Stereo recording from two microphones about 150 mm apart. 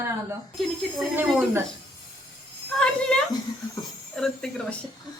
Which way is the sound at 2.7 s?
5° left (ahead or behind).